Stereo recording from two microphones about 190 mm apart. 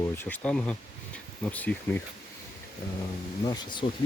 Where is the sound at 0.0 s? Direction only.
10° left (ahead or behind).